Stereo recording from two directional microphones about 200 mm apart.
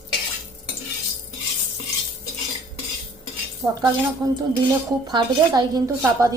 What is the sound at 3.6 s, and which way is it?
A woman's voice, 20° right (ahead or behind).